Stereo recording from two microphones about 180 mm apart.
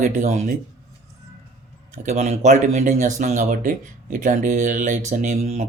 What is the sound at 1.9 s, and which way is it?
Speech, 40° right (ahead or behind).